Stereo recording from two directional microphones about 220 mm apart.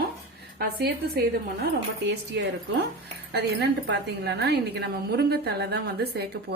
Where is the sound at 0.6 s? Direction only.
45° right (ahead or behind).